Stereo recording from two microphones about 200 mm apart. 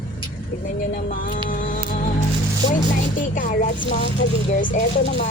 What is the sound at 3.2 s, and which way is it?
Speech, 40° left (ahead or behind).